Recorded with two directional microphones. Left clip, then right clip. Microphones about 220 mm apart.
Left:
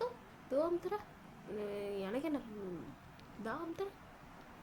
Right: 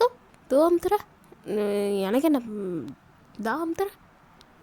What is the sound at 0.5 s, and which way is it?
Speech, 45° right (ahead or behind).